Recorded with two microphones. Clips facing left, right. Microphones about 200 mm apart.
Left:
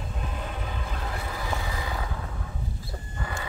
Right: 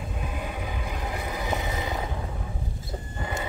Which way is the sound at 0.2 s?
10° right (ahead or behind).